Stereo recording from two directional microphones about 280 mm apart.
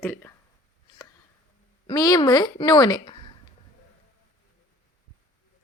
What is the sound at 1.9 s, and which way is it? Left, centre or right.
Speech, centre.